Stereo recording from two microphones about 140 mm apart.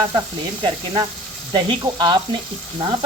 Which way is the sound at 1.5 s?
30° right (ahead or behind).